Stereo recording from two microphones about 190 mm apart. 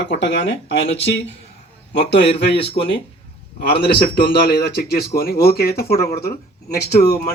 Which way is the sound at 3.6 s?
60° left (ahead or behind).